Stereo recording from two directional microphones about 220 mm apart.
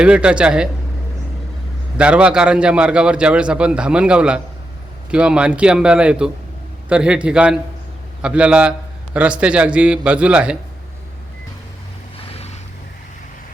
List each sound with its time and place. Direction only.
0.0 s a man's voice: 5° right (ahead or behind)
2.0 s a man's voice: 5° right (ahead or behind)
12.1 s boat: 30° left (ahead or behind)